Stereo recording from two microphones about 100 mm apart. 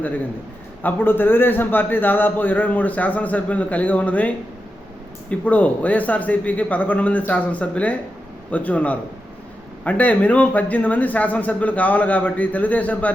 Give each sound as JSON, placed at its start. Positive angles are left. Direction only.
{"t": 0.8, "sound": "a man's voice", "side_deg": 20}